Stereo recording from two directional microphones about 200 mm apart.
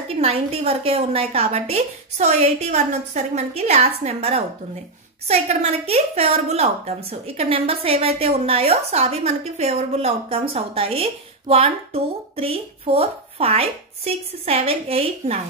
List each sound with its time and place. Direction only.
0.1 s a woman's voice: 30° right (ahead or behind)